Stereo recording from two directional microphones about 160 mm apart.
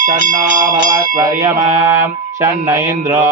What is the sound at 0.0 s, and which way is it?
Speech, 55° right (ahead or behind).